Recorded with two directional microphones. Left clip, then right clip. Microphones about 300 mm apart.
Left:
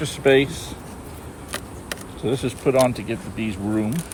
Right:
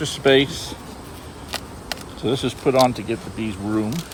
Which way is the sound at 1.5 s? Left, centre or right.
Centre.